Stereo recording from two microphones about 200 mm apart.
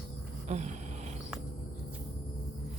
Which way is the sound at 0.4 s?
35° right (ahead or behind).